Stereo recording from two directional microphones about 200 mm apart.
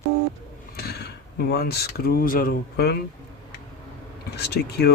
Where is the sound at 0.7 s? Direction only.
55° left (ahead or behind).